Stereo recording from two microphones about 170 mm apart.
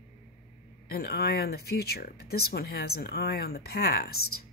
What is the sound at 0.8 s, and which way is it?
Speech, 65° left (ahead or behind).